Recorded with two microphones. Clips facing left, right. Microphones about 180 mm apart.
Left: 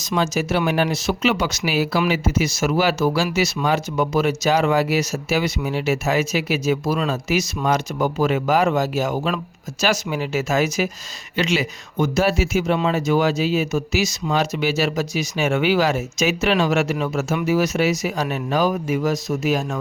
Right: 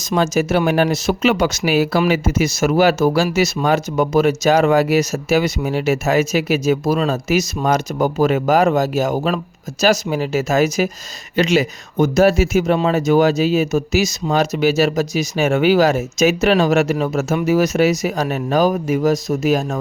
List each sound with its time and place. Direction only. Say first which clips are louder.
0.0 s speech: right 4 dB; 50° right (ahead or behind)